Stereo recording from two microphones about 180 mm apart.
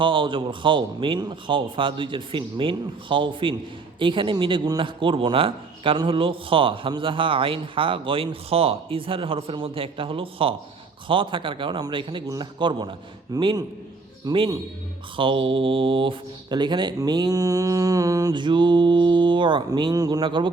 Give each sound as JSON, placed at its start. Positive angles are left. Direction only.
{"t": 0.0, "sound": "a man's voice", "side_deg": -30}